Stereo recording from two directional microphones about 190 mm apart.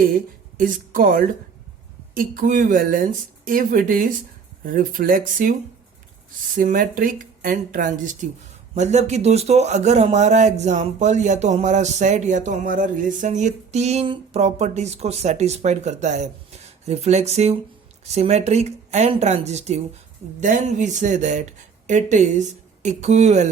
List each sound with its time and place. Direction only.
0.5 s a man's voice: 45° right (ahead or behind)